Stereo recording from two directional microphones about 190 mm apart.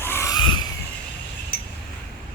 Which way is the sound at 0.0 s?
15° left (ahead or behind).